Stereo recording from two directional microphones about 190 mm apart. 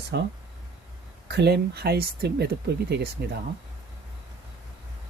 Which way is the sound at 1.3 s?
60° right (ahead or behind).